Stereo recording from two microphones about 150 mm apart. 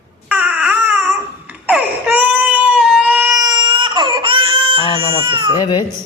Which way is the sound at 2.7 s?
Centre (ahead or behind).